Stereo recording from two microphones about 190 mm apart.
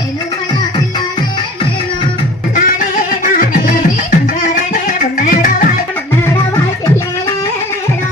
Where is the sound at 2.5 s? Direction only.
45° left (ahead or behind).